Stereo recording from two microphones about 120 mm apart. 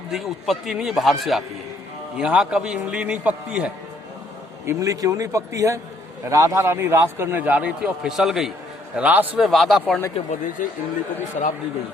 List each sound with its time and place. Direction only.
0.1 s a man's voice: centre (ahead or behind)
4.6 s a man's voice: 25° right (ahead or behind)
9.5 s speech: centre (ahead or behind)
10.6 s speech: 90° left
11.4 s speech: 75° left (ahead or behind)